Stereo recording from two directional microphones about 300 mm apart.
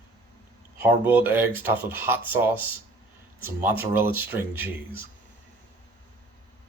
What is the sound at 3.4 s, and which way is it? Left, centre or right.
Speech, centre.